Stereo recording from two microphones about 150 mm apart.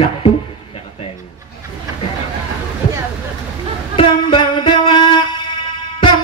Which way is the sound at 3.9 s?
35° left (ahead or behind).